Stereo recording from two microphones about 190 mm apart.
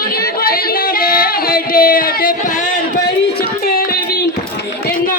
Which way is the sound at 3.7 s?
50° left (ahead or behind).